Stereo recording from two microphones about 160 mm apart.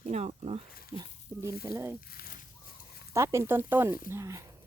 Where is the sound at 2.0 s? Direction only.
65° left (ahead or behind).